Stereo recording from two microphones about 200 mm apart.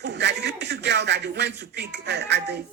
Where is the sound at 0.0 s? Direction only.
60° right (ahead or behind).